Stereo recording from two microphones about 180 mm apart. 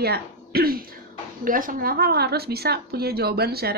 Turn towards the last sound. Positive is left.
turn(degrees=-60)  # may be behind; listen again after turning